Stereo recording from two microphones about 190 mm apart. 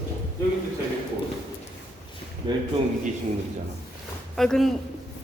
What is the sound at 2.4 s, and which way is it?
Speech, 25° right (ahead or behind).